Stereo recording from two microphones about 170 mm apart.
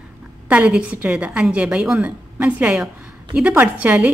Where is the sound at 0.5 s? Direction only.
5° right (ahead or behind).